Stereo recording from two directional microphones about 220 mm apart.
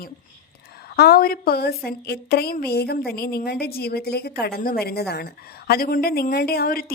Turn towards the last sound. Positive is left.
turn(degrees=45)  # may be behind; listen again after turning